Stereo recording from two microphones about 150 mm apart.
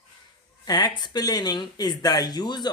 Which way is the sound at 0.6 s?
25° left (ahead or behind).